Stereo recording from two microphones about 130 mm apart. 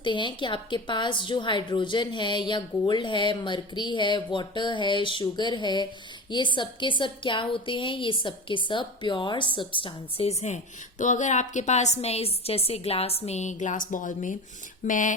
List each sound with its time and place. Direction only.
0.0 s a woman's voice: 40° left (ahead or behind)
10.4 s a woman's voice: 70° left (ahead or behind)